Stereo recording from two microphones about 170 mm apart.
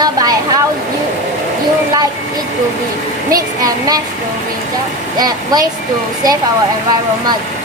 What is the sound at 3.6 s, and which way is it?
Speech, 20° right (ahead or behind).